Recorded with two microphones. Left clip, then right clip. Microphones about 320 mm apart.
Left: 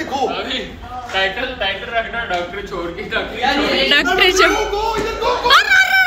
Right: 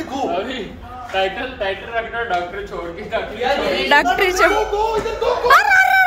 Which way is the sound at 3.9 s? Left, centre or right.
Centre.